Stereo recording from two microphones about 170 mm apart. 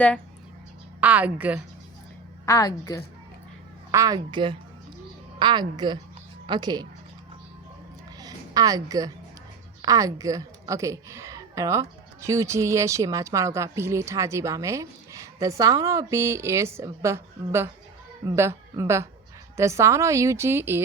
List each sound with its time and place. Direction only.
1.0 s a woman's voice: 10° right (ahead or behind)
2.5 s a woman's voice: 20° left (ahead or behind)
3.9 s a woman's voice: 20° right (ahead or behind)
8.2 s a sound: 20° right (ahead or behind)
9.8 s a woman's voice: 20° right (ahead or behind)